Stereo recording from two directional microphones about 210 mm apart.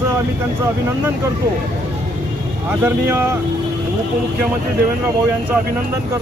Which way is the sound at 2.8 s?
10° right (ahead or behind).